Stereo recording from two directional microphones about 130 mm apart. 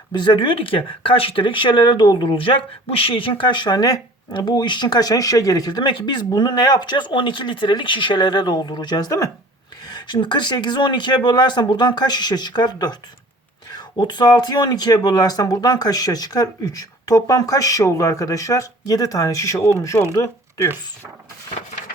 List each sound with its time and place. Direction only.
0.1 s speech: 35° left (ahead or behind)